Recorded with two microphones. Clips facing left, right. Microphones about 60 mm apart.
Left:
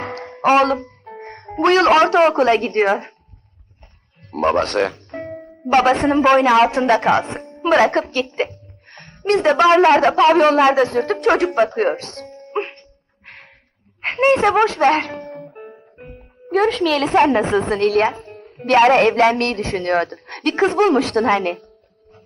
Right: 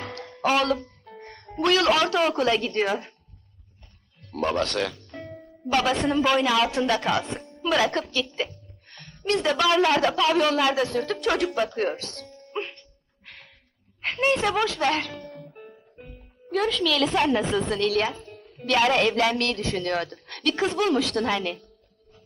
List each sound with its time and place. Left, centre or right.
0.0 s speech: left
4.2 s speech: left
4.9 s music: left
5.6 s a woman's voice: left
7.6 s a woman's voice: left
12.5 s music: left
14.0 s speech: left